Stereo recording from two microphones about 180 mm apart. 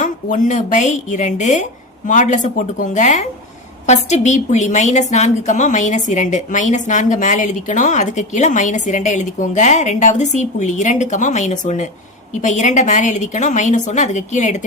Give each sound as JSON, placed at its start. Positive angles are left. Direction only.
{"t": 0.0, "sound": "a woman's voice", "side_deg": 45}